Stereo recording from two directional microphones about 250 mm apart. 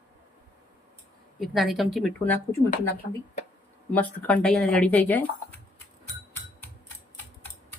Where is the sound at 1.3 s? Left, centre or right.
Centre.